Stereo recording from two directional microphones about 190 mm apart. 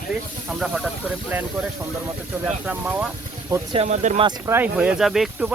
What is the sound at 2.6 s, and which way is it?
Speech, 5° right (ahead or behind).